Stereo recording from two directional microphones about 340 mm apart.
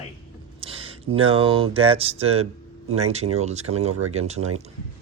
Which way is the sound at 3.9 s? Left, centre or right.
Right.